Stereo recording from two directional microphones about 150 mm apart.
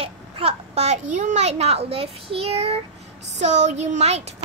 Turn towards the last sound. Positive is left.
turn(degrees=-45)  # may be behind; listen again after turning